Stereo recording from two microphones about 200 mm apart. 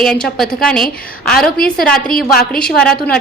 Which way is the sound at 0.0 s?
Centre (ahead or behind).